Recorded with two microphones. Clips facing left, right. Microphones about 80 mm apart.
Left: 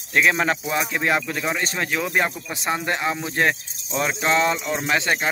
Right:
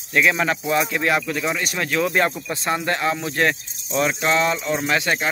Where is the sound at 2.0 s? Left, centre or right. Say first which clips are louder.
Right 5 dB; centre.